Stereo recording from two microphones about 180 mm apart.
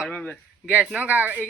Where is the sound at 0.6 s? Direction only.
5° right (ahead or behind).